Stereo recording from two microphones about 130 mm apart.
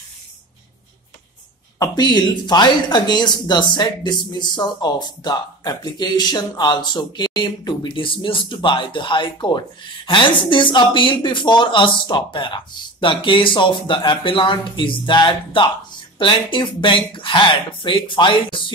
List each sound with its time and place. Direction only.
1.8 s speech: 35° left (ahead or behind)